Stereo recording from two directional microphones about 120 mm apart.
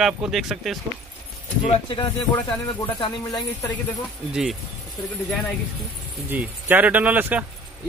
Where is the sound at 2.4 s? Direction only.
40° left (ahead or behind).